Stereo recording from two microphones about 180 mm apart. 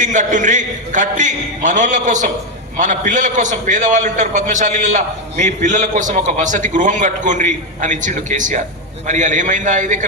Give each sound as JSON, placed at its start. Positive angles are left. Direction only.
{"t": 0.0, "sound": "a man's voice", "side_deg": -45}